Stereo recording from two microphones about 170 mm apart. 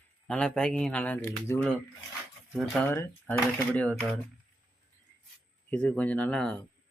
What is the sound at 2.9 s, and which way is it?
Speech, 15° left (ahead or behind).